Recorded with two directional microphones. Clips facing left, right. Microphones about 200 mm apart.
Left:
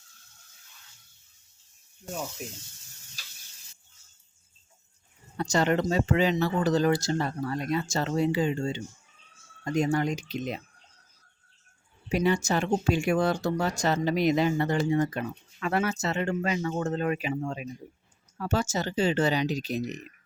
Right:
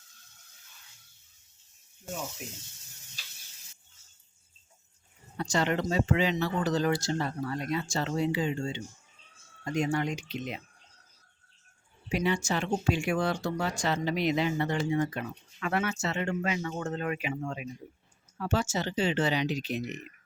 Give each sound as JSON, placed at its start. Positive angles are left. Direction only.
{"t": 5.5, "sound": "speech", "side_deg": 40}
{"t": 12.0, "sound": "speech", "side_deg": 40}